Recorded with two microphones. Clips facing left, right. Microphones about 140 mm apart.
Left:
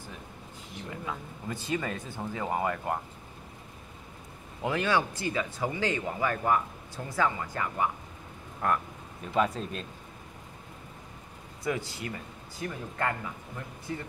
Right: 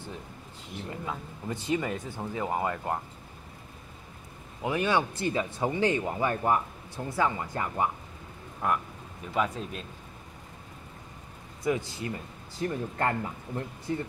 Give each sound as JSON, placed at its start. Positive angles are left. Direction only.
{"t": 0.8, "sound": "speech", "side_deg": -20}
{"t": 4.6, "sound": "speech", "side_deg": -20}
{"t": 8.6, "sound": "speech", "side_deg": -10}
{"t": 11.6, "sound": "speech", "side_deg": -20}
{"t": 12.6, "sound": "speech", "side_deg": -35}